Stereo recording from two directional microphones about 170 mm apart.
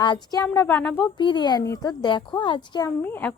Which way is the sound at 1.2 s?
25° left (ahead or behind).